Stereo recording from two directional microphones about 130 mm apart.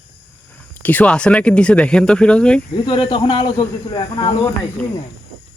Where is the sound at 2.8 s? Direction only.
40° left (ahead or behind).